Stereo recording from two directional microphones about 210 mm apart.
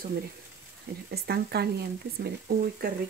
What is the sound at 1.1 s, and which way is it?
Speech, 50° right (ahead or behind).